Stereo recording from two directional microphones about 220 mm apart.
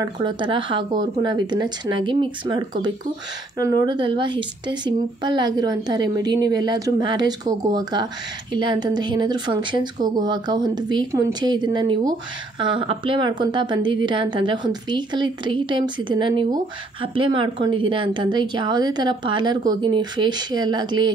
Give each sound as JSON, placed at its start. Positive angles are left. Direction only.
{"t": 0.0, "sound": "a woman's voice", "side_deg": -20}